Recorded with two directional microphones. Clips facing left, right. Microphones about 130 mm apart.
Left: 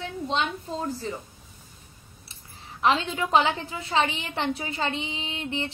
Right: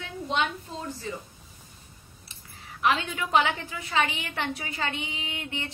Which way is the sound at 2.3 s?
30° left (ahead or behind).